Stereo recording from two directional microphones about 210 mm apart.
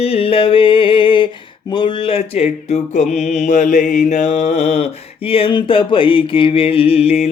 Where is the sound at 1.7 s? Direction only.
25° left (ahead or behind).